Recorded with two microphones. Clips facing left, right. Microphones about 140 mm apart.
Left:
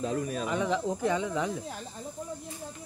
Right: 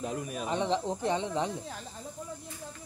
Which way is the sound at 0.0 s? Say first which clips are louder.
Left 4 dB; 15° right (ahead or behind).